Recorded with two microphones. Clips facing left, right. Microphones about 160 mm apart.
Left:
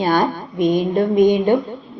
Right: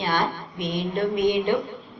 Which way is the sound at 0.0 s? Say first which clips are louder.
Left 8 dB; 40° left (ahead or behind).